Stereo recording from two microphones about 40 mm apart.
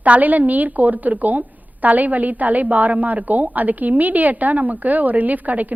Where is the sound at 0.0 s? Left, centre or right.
Right.